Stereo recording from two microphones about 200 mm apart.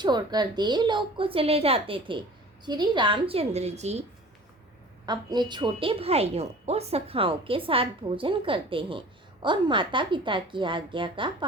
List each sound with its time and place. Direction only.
0.0 s a woman's voice: 20° right (ahead or behind)
5.0 s a woman's voice: 20° right (ahead or behind)